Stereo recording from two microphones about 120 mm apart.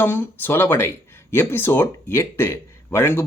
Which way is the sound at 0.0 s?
20° left (ahead or behind).